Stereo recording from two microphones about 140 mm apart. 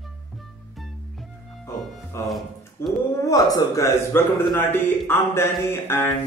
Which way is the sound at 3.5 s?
20° left (ahead or behind).